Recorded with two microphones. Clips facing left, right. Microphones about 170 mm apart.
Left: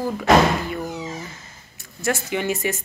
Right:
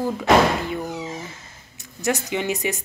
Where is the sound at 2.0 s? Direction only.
20° right (ahead or behind).